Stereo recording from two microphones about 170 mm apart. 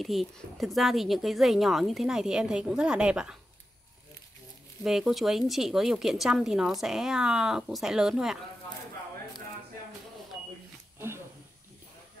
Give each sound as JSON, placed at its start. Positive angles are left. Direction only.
{"t": 0.0, "sound": "a woman's voice", "side_deg": 0}
{"t": 4.8, "sound": "a woman's voice", "side_deg": 0}